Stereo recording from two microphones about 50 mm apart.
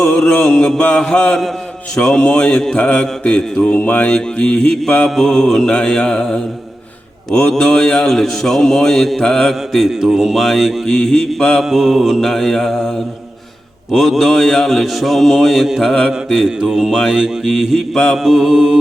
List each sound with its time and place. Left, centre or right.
0.0 s mantra: centre
0.9 s a man's voice: centre
3.8 s speech: left
4.1 s speech: centre
5.0 s a man's voice: centre
7.3 s a man's voice: centre
9.3 s mantra: centre
10.9 s a man's voice: centre
11.6 s mantra: centre
13.9 s mantra: centre
17.1 s a man's voice: centre
17.9 s a man's voice: centre
18.2 s a man's voice: centre